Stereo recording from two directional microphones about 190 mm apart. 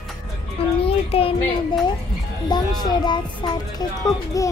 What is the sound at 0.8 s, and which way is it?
Speech, 30° left (ahead or behind).